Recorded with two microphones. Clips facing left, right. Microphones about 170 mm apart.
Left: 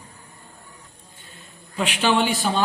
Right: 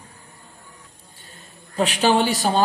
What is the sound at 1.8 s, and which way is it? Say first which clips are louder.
Speech: right 2 dB; 40° right (ahead or behind).